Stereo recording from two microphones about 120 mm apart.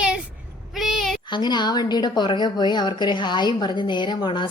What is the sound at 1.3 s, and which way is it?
A woman's voice, 40° left (ahead or behind).